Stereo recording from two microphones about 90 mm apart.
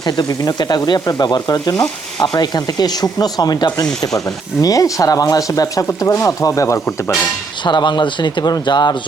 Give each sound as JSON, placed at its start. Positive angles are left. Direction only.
{"t": 0.0, "sound": "speech", "side_deg": 50}
{"t": 7.6, "sound": "speech", "side_deg": 55}